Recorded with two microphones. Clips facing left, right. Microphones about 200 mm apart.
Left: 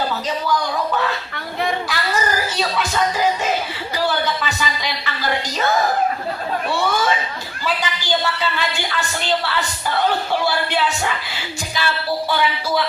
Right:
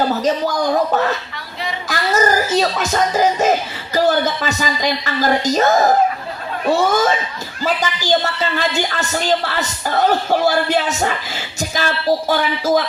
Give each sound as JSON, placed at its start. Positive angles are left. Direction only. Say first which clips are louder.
{"t": 0.1, "sound": "a woman's voice", "louder": "right 4 dB", "side_deg": -45}
{"t": 1.9, "sound": "music", "louder": "right 5 dB", "side_deg": -45}
{"t": 3.9, "sound": "a woman's voice", "louder": "right 6 dB", "side_deg": -45}